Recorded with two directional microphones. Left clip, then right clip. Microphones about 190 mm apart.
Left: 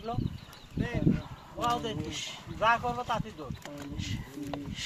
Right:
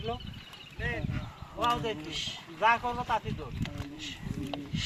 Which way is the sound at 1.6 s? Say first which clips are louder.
Right 1 dB; 50° left (ahead or behind).